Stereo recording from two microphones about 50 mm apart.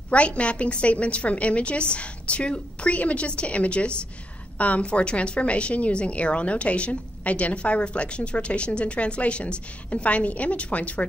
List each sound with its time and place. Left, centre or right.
0.1 s a woman's voice: left